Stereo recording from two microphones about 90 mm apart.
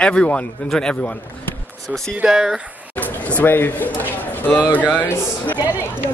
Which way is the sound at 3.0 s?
15° left (ahead or behind).